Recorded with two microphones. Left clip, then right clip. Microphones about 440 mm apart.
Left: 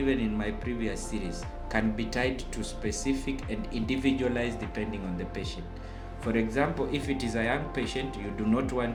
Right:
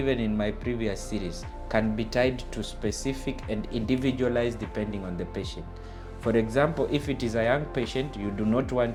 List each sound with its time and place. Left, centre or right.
0.0 s speech: right
6.3 s speech: right